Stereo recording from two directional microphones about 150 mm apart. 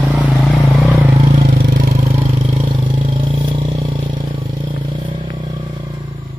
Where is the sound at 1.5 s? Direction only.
75° right (ahead or behind).